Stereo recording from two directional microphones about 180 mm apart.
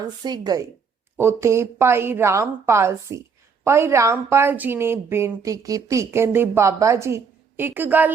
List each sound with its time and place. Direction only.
0.0 s a woman's voice: 20° right (ahead or behind)